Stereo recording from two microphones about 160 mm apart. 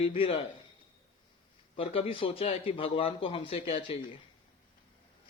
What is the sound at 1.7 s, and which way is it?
A man's voice, 35° left (ahead or behind).